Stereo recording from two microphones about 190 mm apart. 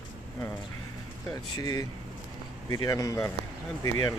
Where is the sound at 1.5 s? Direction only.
20° left (ahead or behind).